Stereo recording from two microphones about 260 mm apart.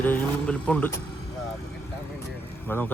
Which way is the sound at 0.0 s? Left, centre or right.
Centre.